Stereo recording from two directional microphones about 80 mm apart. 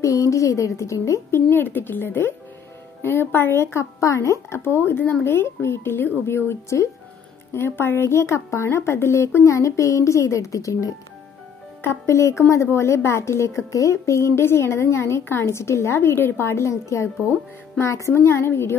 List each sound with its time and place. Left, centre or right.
0.0 s a woman's voice: left
1.5 s a woman's voice: left